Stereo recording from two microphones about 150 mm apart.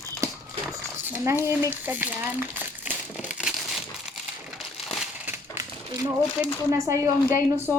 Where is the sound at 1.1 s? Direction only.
15° right (ahead or behind).